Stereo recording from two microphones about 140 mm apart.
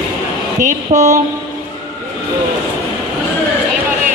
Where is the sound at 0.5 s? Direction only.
65° right (ahead or behind).